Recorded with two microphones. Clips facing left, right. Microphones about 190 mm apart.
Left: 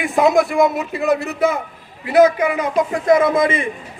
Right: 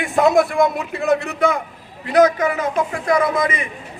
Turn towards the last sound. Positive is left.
turn(degrees=25)  # may be behind; listen again after turning